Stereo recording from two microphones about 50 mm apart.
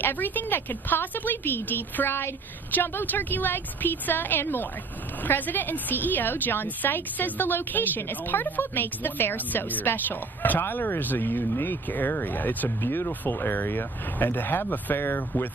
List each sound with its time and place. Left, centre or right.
0.0 s a woman's voice: left